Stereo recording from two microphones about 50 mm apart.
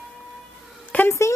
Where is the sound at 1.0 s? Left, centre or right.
Left.